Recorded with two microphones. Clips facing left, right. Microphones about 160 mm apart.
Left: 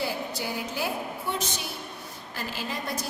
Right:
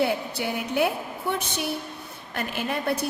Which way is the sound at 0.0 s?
60° right (ahead or behind).